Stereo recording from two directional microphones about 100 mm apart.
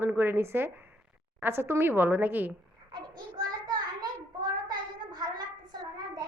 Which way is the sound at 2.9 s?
50° right (ahead or behind).